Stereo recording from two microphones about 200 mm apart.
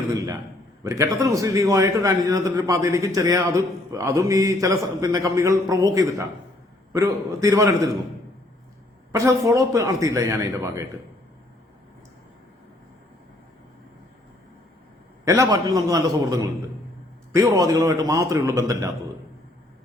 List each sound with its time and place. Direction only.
0.9 s a man's voice: 15° right (ahead or behind)
9.2 s a man's voice: 15° right (ahead or behind)
15.2 s a man's voice: 15° right (ahead or behind)